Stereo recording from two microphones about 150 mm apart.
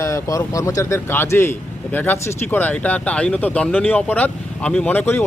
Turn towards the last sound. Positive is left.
turn(degrees=15)  # may be behind; listen again after turning